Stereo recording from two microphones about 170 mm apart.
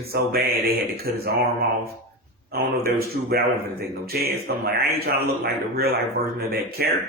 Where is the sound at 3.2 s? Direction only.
65° right (ahead or behind).